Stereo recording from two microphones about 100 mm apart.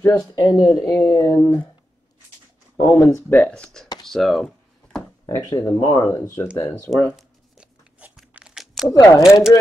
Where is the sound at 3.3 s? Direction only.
10° left (ahead or behind).